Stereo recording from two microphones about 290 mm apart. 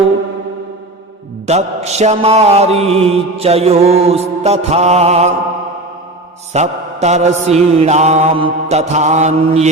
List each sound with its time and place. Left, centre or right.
1.5 s mantra: right
6.5 s mantra: right